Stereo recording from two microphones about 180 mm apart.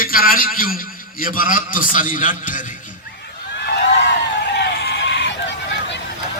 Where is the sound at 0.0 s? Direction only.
55° left (ahead or behind).